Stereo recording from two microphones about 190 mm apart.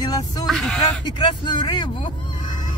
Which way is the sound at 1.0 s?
25° left (ahead or behind).